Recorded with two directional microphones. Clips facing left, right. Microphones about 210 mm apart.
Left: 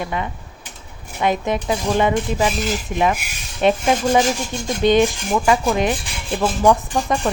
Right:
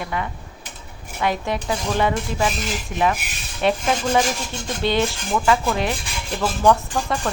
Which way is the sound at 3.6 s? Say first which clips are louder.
Left 4 dB; 20° left (ahead or behind).